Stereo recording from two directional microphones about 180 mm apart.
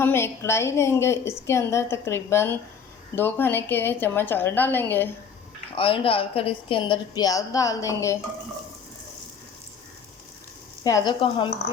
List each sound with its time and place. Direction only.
0.0 s a woman's voice: 15° left (ahead or behind)
5.7 s a woman's voice: 30° left (ahead or behind)
10.8 s a woman's voice: 20° left (ahead or behind)